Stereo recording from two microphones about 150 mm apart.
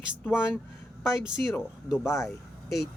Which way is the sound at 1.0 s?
5° right (ahead or behind).